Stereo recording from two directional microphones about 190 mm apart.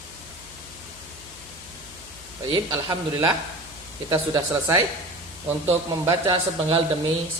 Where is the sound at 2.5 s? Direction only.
20° right (ahead or behind).